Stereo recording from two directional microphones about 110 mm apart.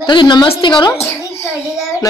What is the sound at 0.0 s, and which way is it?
Speech, 45° left (ahead or behind).